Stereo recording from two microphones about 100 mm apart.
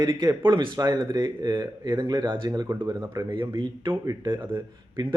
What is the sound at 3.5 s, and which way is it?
Speech, 45° right (ahead or behind).